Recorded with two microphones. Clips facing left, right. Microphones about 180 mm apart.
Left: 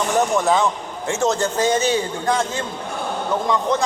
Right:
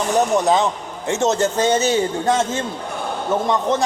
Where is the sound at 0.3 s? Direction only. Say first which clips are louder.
Right 1 dB; 20° right (ahead or behind).